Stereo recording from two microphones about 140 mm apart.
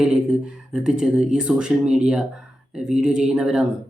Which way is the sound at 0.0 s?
5° right (ahead or behind).